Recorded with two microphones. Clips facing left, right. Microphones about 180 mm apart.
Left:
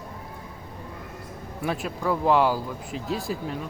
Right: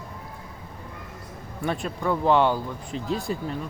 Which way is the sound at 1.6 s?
5° left (ahead or behind).